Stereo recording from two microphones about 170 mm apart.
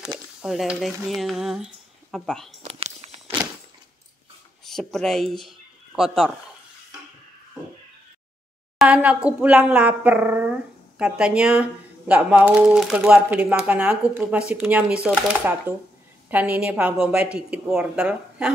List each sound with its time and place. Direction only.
0.4 s speech: centre (ahead or behind)
2.6 s a sound: 40° right (ahead or behind)
4.6 s speech: centre (ahead or behind)
8.7 s speech: 5° right (ahead or behind)